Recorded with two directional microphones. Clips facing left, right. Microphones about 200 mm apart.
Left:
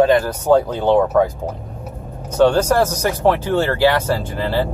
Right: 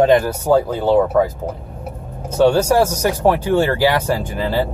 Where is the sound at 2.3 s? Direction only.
10° right (ahead or behind).